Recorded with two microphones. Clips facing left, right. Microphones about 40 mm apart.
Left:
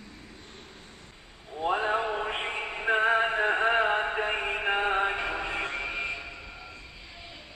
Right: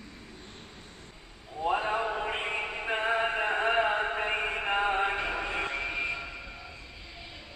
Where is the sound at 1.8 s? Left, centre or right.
Left.